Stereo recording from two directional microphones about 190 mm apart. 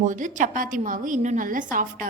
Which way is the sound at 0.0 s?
40° right (ahead or behind).